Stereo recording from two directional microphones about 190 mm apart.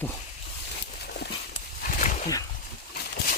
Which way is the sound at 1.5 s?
45° left (ahead or behind).